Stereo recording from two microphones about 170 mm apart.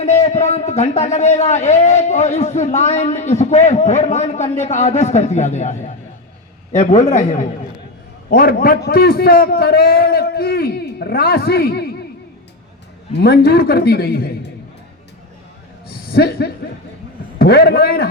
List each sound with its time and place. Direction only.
0.0 s a man's voice: 40° left (ahead or behind)
8.3 s a man's voice: 60° left (ahead or behind)
13.1 s a man's voice: 70° left (ahead or behind)
16.1 s a man's voice: 70° left (ahead or behind)